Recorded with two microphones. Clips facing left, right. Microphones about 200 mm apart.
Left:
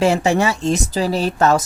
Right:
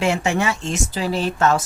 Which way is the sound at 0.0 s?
35° left (ahead or behind).